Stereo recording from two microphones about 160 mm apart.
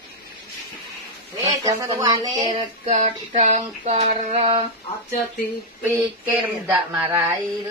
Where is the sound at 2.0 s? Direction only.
20° right (ahead or behind).